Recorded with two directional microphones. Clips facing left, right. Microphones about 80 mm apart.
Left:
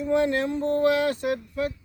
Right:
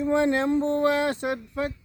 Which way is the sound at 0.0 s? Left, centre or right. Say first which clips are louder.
Right 1 dB; right.